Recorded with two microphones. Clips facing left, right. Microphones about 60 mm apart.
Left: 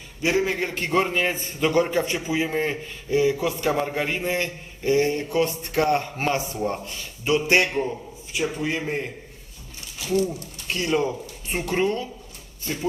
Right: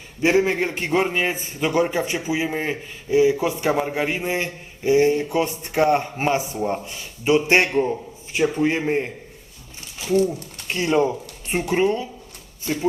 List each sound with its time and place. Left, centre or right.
0.2 s a man's voice: right
10.7 s speech: right